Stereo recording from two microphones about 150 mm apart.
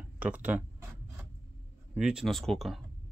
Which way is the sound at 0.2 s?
10° right (ahead or behind).